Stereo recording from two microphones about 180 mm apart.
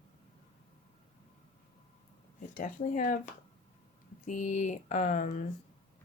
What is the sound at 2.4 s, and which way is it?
Speech, 45° left (ahead or behind).